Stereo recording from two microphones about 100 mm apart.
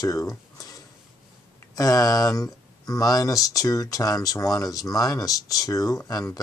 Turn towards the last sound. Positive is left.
turn(degrees=40)  # may be behind; listen again after turning